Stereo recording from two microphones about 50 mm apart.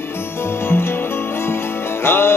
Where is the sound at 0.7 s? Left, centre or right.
Left.